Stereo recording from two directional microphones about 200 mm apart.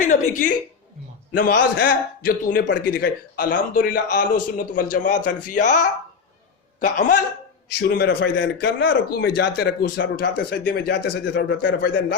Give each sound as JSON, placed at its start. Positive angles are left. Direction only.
{"t": 0.0, "sound": "a man's voice", "side_deg": 40}
{"t": 2.6, "sound": "speech", "side_deg": 60}
{"t": 3.3, "sound": "a man's voice", "side_deg": 45}
{"t": 7.8, "sound": "speech", "side_deg": 60}